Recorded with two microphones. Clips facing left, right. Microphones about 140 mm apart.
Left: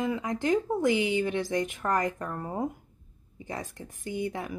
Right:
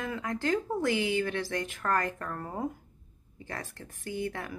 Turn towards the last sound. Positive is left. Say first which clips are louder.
# left 2 dB
turn(degrees=15)  # may be behind; listen again after turning